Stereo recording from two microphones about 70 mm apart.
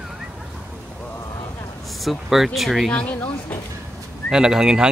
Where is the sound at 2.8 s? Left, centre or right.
Left.